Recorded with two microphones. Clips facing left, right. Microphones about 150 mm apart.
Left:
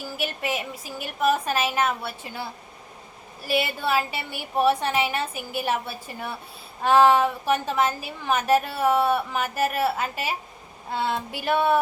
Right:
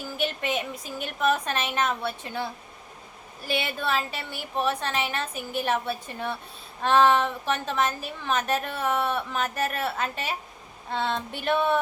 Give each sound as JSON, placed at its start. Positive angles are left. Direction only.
{"t": 0.2, "sound": "a woman's voice", "side_deg": 5}